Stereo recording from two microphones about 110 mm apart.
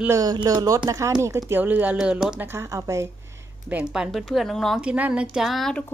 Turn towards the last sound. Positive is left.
turn(degrees=0)  # may be behind; listen again after turning